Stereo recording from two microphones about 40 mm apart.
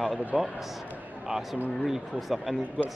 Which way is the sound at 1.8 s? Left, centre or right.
Centre.